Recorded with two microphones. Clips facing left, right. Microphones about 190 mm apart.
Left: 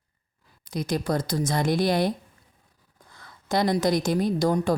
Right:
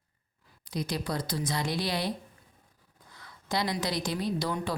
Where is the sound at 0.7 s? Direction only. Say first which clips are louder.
Left 6 dB; 45° left (ahead or behind).